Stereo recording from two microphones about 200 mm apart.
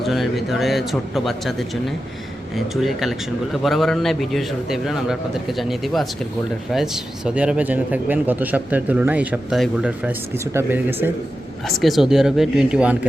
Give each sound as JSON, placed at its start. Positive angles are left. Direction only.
{"t": 0.0, "sound": "a man's voice", "side_deg": 0}